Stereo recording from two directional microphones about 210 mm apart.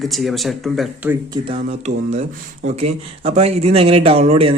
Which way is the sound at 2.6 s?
30° right (ahead or behind).